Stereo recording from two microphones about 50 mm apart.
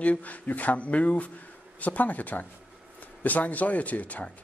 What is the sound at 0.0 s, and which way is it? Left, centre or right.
A man's voice, left.